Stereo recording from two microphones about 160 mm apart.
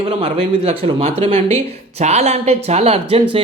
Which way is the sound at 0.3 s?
40° right (ahead or behind).